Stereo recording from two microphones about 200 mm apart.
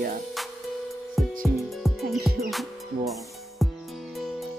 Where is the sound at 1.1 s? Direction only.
Centre (ahead or behind).